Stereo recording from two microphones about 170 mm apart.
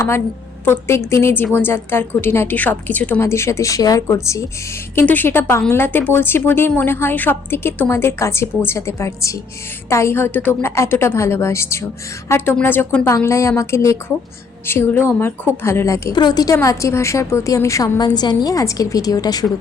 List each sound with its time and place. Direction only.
0.6 s a woman's voice: 15° left (ahead or behind)